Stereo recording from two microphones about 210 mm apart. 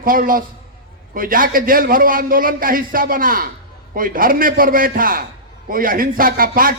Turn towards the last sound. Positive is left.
turn(degrees=-40)  # may be behind; listen again after turning